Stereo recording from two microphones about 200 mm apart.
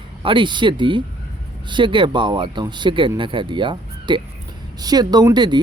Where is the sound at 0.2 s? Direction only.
25° right (ahead or behind).